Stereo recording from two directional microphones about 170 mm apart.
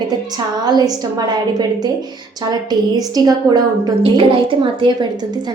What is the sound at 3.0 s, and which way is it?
A woman's voice, 20° right (ahead or behind).